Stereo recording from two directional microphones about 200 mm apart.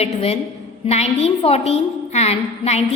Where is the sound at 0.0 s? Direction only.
30° left (ahead or behind).